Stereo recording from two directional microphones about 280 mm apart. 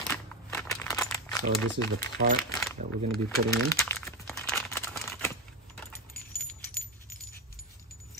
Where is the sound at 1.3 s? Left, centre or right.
Centre.